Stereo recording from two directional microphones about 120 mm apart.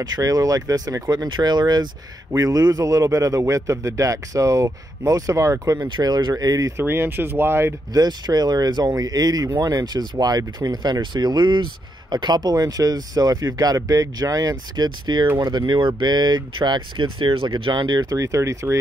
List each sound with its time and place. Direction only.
0.0 s a man's voice: 30° right (ahead or behind)
6.8 s a man's voice: 20° right (ahead or behind)
7.9 s speech: 35° right (ahead or behind)